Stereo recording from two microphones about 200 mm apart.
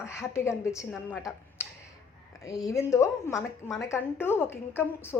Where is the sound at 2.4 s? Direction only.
15° left (ahead or behind).